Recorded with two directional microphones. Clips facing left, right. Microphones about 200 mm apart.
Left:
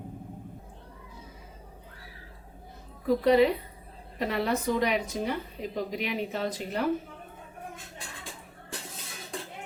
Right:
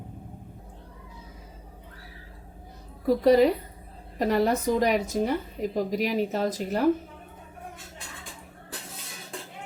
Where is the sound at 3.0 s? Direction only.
40° right (ahead or behind).